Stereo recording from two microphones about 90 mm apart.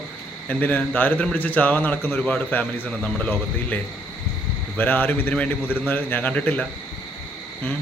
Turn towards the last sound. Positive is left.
turn(degrees=20)  # may be behind; listen again after turning